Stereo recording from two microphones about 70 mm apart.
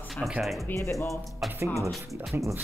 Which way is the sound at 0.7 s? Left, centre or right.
Left.